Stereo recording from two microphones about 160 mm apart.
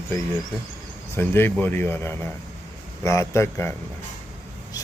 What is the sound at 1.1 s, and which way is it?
A man's voice, 15° left (ahead or behind).